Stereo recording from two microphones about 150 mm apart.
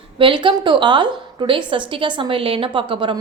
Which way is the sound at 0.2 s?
35° right (ahead or behind).